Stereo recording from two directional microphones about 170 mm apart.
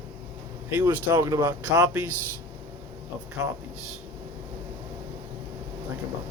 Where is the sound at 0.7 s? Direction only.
10° right (ahead or behind).